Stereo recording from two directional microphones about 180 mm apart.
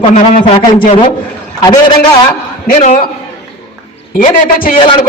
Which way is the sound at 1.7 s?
25° left (ahead or behind).